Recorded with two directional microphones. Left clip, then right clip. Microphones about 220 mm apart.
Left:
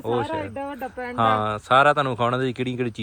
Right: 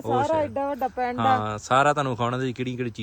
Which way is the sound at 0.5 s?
30° right (ahead or behind).